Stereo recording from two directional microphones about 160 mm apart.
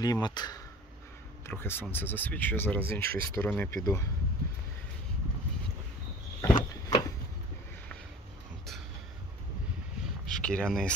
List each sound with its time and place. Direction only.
0.0 s speech: 25° left (ahead or behind)
1.5 s speech: 15° left (ahead or behind)
6.4 s a sound: 25° left (ahead or behind)
10.2 s speech: 5° left (ahead or behind)